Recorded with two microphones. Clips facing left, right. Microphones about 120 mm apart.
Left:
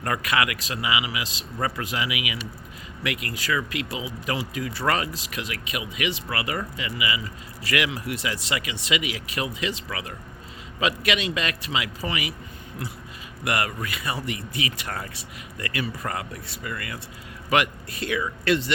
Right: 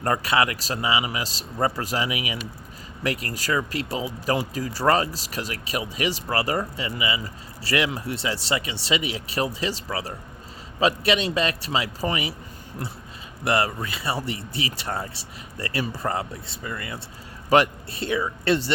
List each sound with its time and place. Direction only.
0.0 s speech: 30° right (ahead or behind)
13.4 s speech: 30° right (ahead or behind)